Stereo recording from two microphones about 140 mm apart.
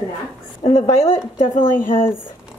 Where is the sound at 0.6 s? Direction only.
55° left (ahead or behind).